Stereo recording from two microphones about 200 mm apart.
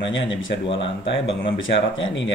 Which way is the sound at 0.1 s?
70° left (ahead or behind).